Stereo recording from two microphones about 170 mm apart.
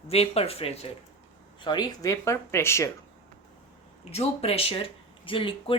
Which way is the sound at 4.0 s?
35° left (ahead or behind).